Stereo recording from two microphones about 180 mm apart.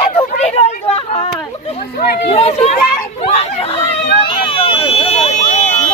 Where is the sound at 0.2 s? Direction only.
30° left (ahead or behind).